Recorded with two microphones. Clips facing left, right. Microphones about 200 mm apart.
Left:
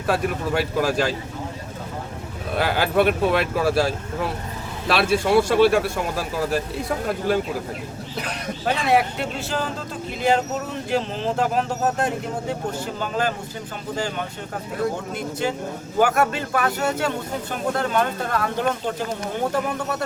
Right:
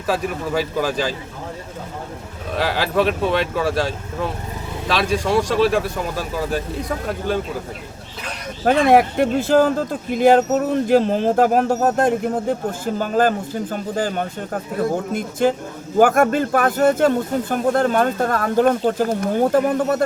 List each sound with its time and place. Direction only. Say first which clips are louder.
0.1 s speech: right 1 dB; centre (ahead or behind)
2.6 s speech: even; centre (ahead or behind)
8.6 s speech: right 7 dB; 50° right (ahead or behind)